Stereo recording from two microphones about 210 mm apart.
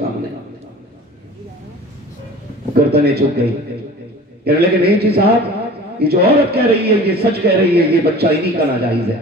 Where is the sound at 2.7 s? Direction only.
50° right (ahead or behind).